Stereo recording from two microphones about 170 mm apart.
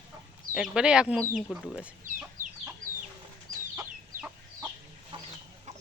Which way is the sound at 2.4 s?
50° right (ahead or behind).